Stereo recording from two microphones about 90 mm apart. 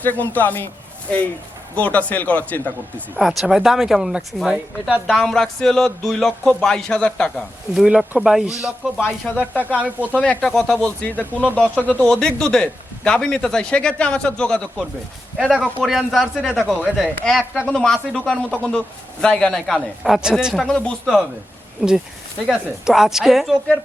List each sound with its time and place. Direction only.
0.0 s speech: 20° left (ahead or behind)
1.7 s a man's voice: 15° left (ahead or behind)
3.2 s speech: centre (ahead or behind)
5.1 s a man's voice: 5° left (ahead or behind)
7.8 s speech: 10° right (ahead or behind)
10.1 s a man's voice: 15° left (ahead or behind)
11.0 s a man's voice: 15° left (ahead or behind)
15.6 s speech: centre (ahead or behind)
16.7 s a man's voice: 15° left (ahead or behind)
17.2 s a man's voice: centre (ahead or behind)
21.8 s speech: 5° right (ahead or behind)